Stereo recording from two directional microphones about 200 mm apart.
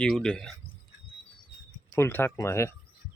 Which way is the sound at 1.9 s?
10° left (ahead or behind).